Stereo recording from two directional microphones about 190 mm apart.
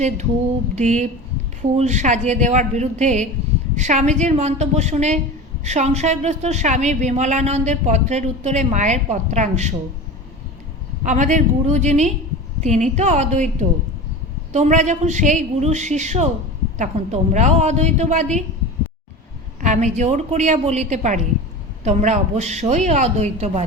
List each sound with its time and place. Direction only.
0.8 s a woman's voice: 40° right (ahead or behind)
11.0 s a woman's voice: 40° right (ahead or behind)
19.6 s a woman's voice: 40° right (ahead or behind)